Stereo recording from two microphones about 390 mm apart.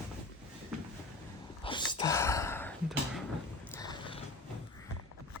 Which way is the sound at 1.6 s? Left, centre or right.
Centre.